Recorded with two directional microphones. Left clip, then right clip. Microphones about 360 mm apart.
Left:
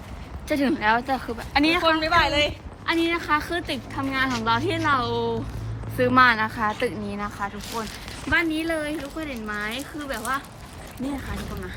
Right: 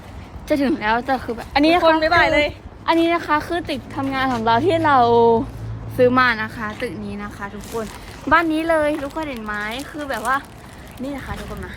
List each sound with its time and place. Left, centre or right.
0.4 s a woman's voice: centre
2.0 s a woman's voice: right
6.0 s a woman's voice: centre
8.3 s a woman's voice: centre